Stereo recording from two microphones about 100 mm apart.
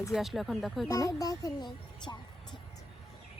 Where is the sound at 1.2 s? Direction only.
35° left (ahead or behind).